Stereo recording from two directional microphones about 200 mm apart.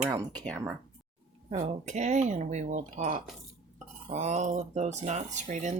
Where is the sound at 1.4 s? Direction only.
35° right (ahead or behind).